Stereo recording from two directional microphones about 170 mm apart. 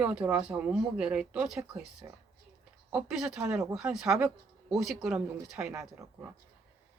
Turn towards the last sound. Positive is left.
turn(degrees=-5)  # may be behind; listen again after turning